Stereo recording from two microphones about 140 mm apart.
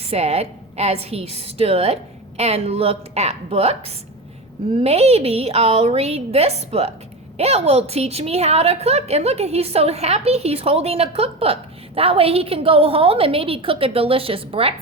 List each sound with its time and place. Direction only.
0.0 s a woman's voice: 50° right (ahead or behind)